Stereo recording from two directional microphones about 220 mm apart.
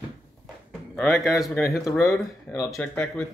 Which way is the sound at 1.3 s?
Centre (ahead or behind).